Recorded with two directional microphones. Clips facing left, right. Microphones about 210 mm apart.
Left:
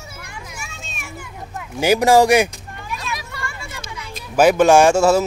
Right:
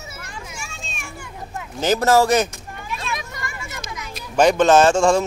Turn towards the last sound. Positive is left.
turn(degrees=10)  # may be behind; listen again after turning